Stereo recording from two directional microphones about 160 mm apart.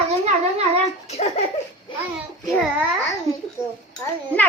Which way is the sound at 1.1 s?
40° left (ahead or behind).